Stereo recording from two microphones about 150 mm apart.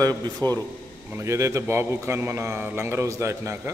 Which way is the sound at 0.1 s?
10° left (ahead or behind).